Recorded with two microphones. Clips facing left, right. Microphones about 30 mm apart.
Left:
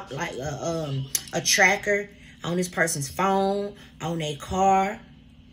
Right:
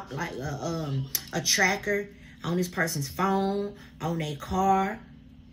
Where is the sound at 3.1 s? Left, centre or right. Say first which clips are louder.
Left 4 dB; left.